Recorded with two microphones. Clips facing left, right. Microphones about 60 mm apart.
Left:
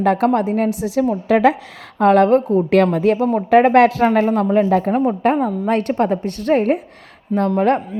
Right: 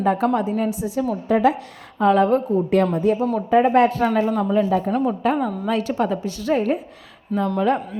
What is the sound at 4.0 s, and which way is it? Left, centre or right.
A woman's voice, left.